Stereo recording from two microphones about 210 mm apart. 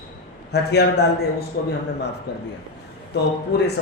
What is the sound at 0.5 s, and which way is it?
A man's voice, 50° left (ahead or behind).